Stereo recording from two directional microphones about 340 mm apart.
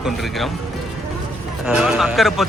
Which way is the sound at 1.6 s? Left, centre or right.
Centre.